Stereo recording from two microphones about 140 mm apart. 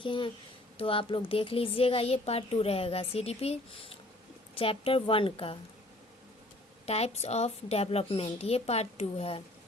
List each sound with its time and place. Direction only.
0.0 s a woman's voice: 35° left (ahead or behind)
6.8 s speech: 50° left (ahead or behind)